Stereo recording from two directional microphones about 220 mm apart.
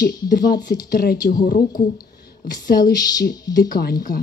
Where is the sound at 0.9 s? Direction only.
45° left (ahead or behind).